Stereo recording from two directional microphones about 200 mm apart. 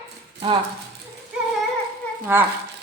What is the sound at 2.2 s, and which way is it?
Speech, 10° right (ahead or behind).